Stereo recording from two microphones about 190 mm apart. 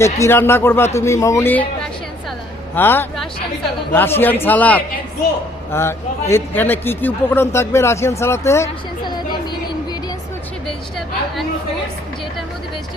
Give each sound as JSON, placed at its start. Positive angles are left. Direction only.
{"t": 0.0, "sound": "a man's voice", "side_deg": 15}
{"t": 2.7, "sound": "a man's voice", "side_deg": 10}